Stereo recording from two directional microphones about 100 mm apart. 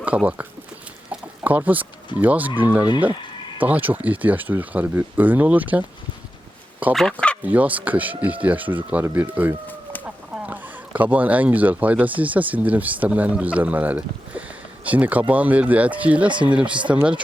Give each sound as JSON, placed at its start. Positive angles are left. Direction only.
{"t": 0.0, "sound": "speech", "side_deg": -15}
{"t": 1.1, "sound": "chicken", "side_deg": -15}
{"t": 2.1, "sound": "speech", "side_deg": -15}
{"t": 7.1, "sound": "speech", "side_deg": 10}
{"t": 7.4, "sound": "speech", "side_deg": -15}